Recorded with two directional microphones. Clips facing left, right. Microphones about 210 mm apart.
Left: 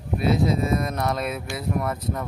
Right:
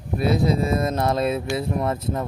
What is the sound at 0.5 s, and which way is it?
Speech, 30° right (ahead or behind).